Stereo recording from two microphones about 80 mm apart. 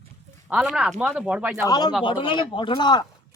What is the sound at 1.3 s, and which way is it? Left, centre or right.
Speech, centre.